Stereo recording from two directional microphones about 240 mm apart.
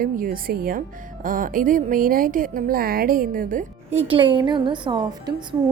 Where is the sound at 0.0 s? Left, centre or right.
Right.